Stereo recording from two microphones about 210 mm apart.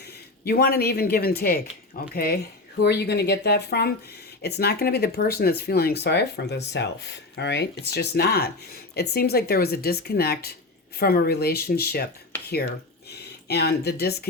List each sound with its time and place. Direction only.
0.4 s speech: 45° left (ahead or behind)
12.3 s a sound: 10° left (ahead or behind)
13.5 s speech: 50° left (ahead or behind)